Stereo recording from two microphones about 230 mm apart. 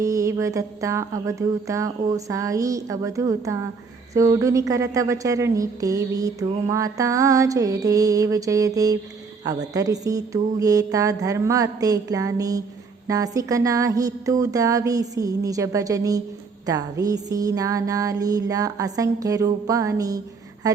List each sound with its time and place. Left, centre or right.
0.0 s a woman's voice: centre